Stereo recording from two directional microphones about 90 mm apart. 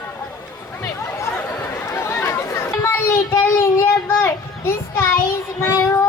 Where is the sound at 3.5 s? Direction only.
35° left (ahead or behind).